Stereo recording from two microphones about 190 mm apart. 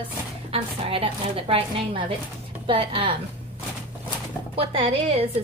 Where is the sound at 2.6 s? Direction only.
25° right (ahead or behind).